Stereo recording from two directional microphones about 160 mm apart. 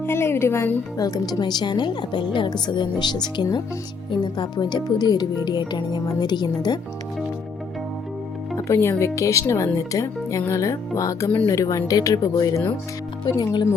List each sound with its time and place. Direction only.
0.0 s speech: 15° left (ahead or behind)
8.5 s speech: 20° left (ahead or behind)